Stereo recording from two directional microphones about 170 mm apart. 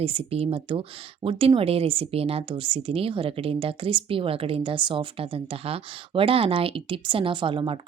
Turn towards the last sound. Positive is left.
turn(degrees=-30)  # may be behind; listen again after turning